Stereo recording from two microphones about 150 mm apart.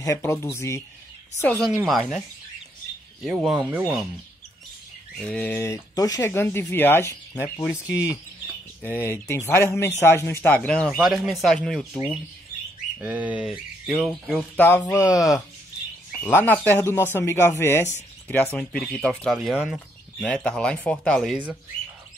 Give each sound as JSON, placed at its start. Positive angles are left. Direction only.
{"t": 0.0, "sound": "speech", "side_deg": 20}
{"t": 1.4, "sound": "speech", "side_deg": 5}
{"t": 1.9, "sound": "speech", "side_deg": -5}
{"t": 3.3, "sound": "speech", "side_deg": -5}
{"t": 5.2, "sound": "speech", "side_deg": 10}
{"t": 13.0, "sound": "speech", "side_deg": -10}
{"t": 14.6, "sound": "speech", "side_deg": 10}
{"t": 18.6, "sound": "speech", "side_deg": 5}